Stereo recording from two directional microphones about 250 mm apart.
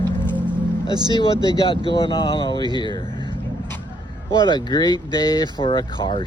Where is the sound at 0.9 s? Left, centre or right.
Centre.